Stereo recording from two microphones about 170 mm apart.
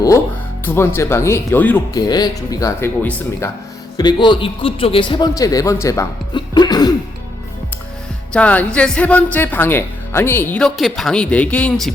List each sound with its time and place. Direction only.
0.6 s speech: 15° left (ahead or behind)
1.9 s a man's voice: 25° left (ahead or behind)
3.9 s a man's voice: 25° left (ahead or behind)
8.3 s speech: 10° left (ahead or behind)